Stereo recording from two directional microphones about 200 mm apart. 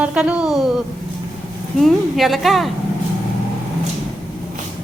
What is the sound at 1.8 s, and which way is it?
Speech, centre (ahead or behind).